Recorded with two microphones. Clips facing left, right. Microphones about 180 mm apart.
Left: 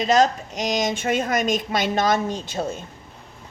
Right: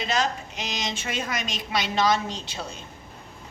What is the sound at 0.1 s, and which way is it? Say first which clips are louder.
A woman's voice: left 9 dB; 45° left (ahead or behind).